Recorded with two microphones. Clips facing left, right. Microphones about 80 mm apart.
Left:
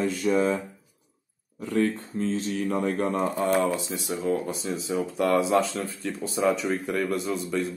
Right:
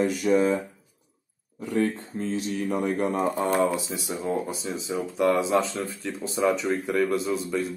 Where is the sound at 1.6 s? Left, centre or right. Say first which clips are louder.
Even; centre.